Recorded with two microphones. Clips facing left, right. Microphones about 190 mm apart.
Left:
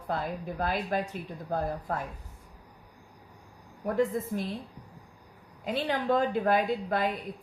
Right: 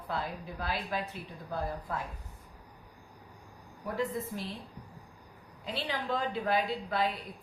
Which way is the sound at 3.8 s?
50° left (ahead or behind).